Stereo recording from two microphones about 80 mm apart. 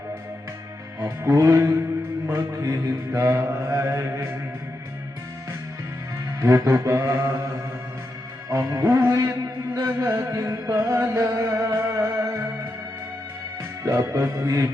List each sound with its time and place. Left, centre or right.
1.3 s music: right
2.3 s mantra: right
6.7 s music: right
7.1 s mantra: right
8.4 s music: right
13.8 s mantra: right